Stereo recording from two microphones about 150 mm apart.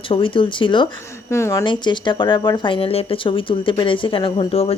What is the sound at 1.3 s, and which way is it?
Speech, 20° left (ahead or behind).